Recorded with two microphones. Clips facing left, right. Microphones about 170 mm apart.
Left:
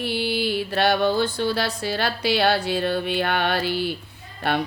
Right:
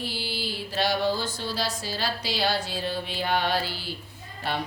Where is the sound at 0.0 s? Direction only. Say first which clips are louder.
Left 9 dB; 60° left (ahead or behind).